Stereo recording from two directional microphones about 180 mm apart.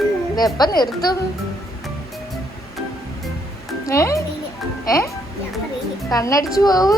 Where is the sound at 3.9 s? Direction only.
15° left (ahead or behind).